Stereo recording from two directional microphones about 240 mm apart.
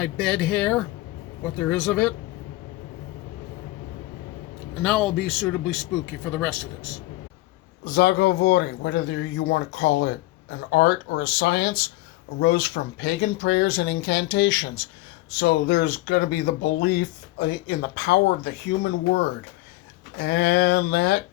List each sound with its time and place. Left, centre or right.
0.0 s speech: centre
4.8 s speech: centre
7.9 s speech: left